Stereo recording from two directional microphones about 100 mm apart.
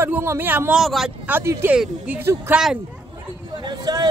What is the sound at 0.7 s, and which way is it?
Speech, 5° right (ahead or behind).